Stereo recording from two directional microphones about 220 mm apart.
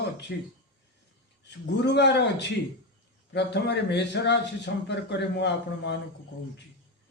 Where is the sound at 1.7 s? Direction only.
50° left (ahead or behind).